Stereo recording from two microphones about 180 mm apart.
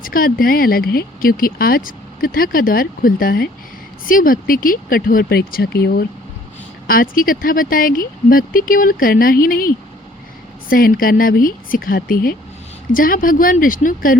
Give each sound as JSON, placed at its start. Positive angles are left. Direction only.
{"t": 0.0, "sound": "speech", "side_deg": 50}
{"t": 6.8, "sound": "speech", "side_deg": 55}